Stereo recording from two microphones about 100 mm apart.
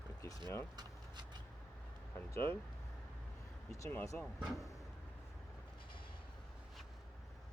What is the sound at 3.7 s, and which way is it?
Speech, 30° left (ahead or behind).